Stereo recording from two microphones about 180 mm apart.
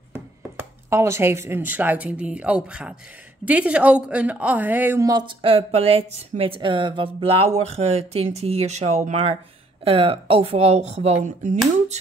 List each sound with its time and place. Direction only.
0.1 s speech: 10° right (ahead or behind); by 11.1 s 35° right (ahead or behind)